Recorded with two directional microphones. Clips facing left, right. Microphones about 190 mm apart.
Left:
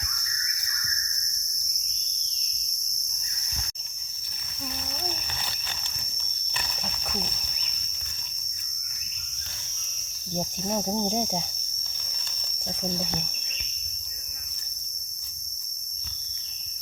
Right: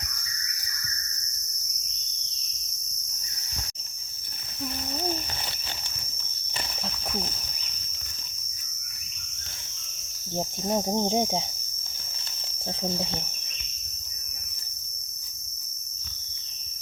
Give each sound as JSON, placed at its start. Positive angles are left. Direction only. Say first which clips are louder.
{"t": 10.3, "sound": "cricket", "louder": "right 2 dB", "side_deg": -25}